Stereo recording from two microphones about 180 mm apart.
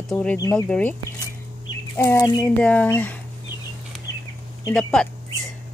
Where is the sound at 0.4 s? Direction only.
20° left (ahead or behind).